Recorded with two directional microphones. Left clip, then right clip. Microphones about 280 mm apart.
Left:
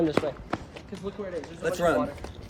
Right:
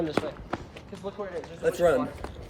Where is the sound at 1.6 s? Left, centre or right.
Centre.